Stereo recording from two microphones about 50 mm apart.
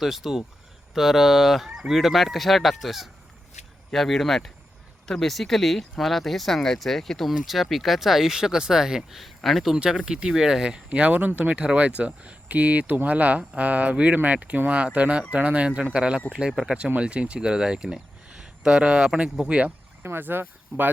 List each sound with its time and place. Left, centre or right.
0.0 s speech: centre
9.7 s speech: centre
10.8 s speech: right
20.0 s speech: right